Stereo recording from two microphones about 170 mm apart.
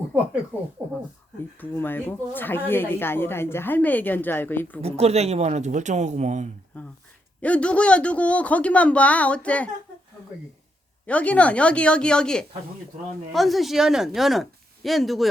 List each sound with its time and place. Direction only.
1.5 s speech: 10° left (ahead or behind)
4.8 s speech: 35° right (ahead or behind)
6.7 s a sound: 10° left (ahead or behind)
7.4 s speech: 5° left (ahead or behind)
11.0 s speech: 10° left (ahead or behind)